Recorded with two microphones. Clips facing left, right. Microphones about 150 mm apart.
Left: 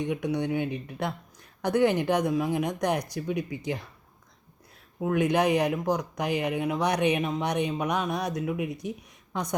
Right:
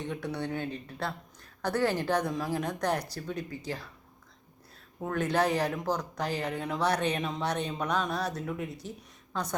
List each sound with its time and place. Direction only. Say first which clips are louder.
0.0 s speech: left 6 dB; 15° left (ahead or behind)
4.9 s a woman's voice: left 4 dB; 10° left (ahead or behind)